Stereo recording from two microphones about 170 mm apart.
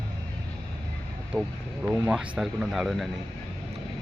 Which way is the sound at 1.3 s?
15° right (ahead or behind).